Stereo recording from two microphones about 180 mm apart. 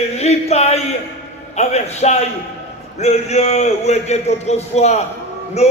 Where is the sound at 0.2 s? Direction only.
35° left (ahead or behind).